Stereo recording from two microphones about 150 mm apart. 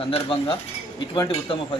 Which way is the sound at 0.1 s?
35° left (ahead or behind).